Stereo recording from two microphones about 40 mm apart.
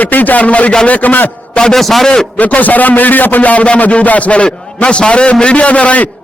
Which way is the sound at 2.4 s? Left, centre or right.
Left.